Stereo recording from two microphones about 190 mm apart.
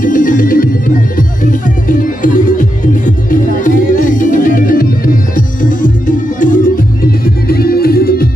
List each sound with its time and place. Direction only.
0.0 s music: 45° left (ahead or behind)